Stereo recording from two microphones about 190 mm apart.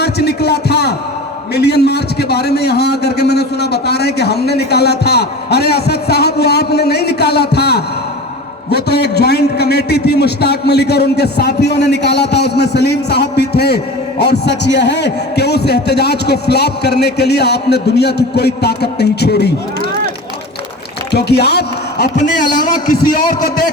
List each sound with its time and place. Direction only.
0.0 s a sound: 60° left (ahead or behind)
1.5 s a man's voice: 60° left (ahead or behind)
21.1 s speech: 60° left (ahead or behind)
22.6 s a man's voice: 45° left (ahead or behind)